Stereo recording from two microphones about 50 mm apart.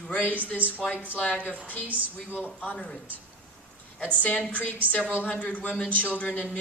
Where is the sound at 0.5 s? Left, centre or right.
Right.